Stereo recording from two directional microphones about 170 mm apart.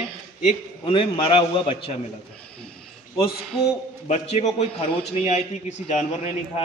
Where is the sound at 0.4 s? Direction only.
35° left (ahead or behind).